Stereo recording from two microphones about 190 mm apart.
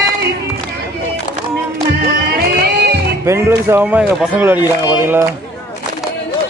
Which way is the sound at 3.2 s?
15° right (ahead or behind).